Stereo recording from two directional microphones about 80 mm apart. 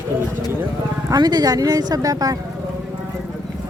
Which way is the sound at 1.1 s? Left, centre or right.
Right.